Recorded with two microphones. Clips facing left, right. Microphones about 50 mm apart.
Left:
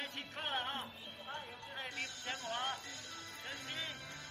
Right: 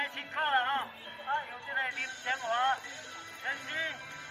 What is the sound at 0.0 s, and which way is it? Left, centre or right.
Music, right.